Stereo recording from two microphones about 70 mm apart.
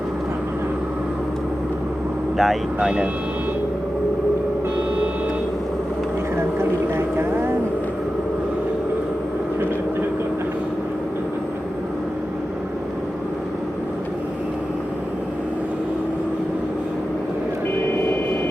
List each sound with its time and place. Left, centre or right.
2.4 s speech: centre
6.6 s vehicle: right
17.9 s vehicle: left